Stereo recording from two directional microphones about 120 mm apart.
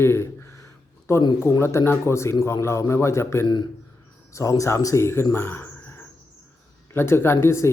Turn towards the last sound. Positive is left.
turn(degrees=20)  # may be behind; listen again after turning